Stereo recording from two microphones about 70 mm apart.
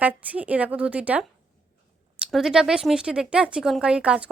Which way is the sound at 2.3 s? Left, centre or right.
Centre.